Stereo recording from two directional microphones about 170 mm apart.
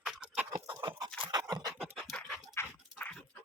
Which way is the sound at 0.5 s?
30° right (ahead or behind).